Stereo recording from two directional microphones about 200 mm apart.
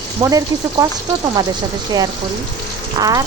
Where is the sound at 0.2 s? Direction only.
15° right (ahead or behind).